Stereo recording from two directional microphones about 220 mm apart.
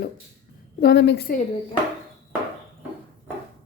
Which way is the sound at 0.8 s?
50° left (ahead or behind).